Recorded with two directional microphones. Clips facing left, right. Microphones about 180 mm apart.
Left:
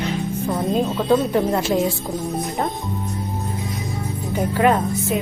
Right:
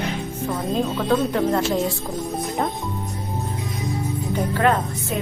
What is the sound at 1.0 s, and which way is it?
Speech, 10° left (ahead or behind).